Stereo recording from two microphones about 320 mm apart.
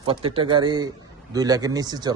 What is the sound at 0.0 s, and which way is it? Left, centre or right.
Speech, centre.